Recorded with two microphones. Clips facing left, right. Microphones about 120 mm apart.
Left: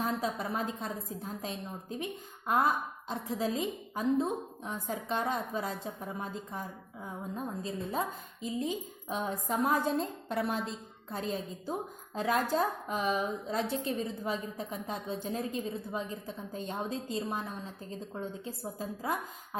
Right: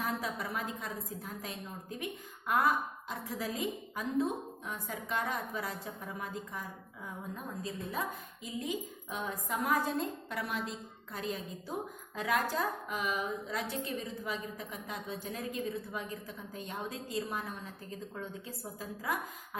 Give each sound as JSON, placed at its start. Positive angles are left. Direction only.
{"t": 0.0, "sound": "a woman's voice", "side_deg": 30}
{"t": 3.1, "sound": "a woman's voice", "side_deg": 25}